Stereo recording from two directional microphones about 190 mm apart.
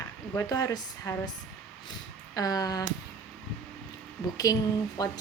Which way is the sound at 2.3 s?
20° left (ahead or behind).